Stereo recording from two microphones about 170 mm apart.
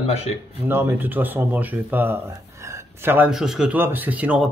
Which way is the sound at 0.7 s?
15° right (ahead or behind).